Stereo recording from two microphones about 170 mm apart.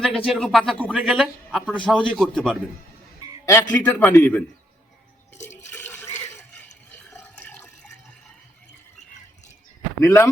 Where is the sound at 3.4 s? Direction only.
15° left (ahead or behind).